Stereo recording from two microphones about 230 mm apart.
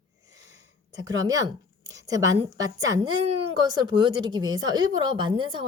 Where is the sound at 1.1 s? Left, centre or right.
Centre.